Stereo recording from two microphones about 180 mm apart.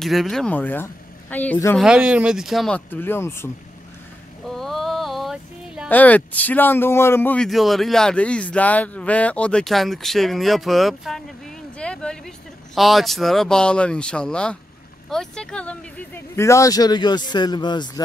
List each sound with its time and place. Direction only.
0.0 s speech: centre (ahead or behind)
1.8 s speech: 5° right (ahead or behind); by 3.4 s 15° left (ahead or behind)
4.5 s a sound: centre (ahead or behind)
5.9 s speech: 10° left (ahead or behind)
7.4 s speech: centre (ahead or behind); by 18.0 s 25° left (ahead or behind)